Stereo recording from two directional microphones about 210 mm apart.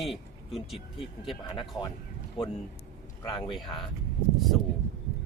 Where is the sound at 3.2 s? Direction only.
15° left (ahead or behind).